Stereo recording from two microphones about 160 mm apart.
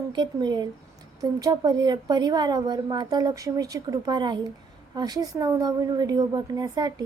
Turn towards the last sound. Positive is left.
turn(degrees=-25)  # may be behind; listen again after turning